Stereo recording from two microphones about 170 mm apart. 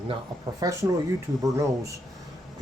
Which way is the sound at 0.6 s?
20° right (ahead or behind).